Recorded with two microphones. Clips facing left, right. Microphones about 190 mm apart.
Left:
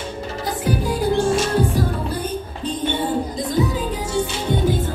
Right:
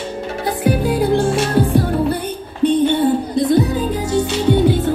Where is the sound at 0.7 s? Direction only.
60° right (ahead or behind).